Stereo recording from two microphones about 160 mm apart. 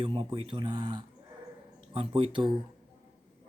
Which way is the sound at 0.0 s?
30° right (ahead or behind).